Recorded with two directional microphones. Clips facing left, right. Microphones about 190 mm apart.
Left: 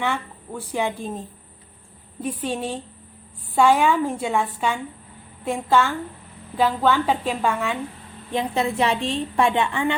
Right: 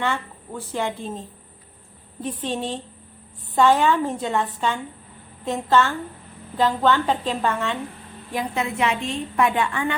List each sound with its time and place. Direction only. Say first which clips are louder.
0.0 s a woman's voice: even; 15° left (ahead or behind)
2.2 s a woman's voice: left 1 dB; 10° left (ahead or behind)
8.3 s a woman's voice: left 3 dB; 30° left (ahead or behind)